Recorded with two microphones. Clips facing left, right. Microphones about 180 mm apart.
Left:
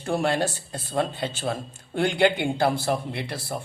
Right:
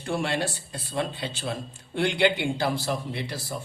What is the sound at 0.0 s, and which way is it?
A man's voice, 45° left (ahead or behind).